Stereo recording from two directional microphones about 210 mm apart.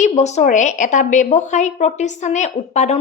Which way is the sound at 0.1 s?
35° left (ahead or behind).